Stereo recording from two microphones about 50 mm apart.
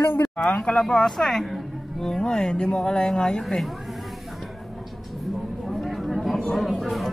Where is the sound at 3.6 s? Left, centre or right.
Centre.